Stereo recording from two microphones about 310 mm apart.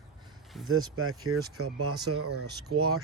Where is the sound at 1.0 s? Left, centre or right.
Right.